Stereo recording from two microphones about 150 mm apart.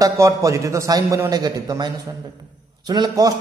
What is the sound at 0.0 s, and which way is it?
A man's voice, 20° right (ahead or behind).